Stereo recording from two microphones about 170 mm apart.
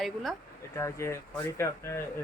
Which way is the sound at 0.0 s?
Centre (ahead or behind).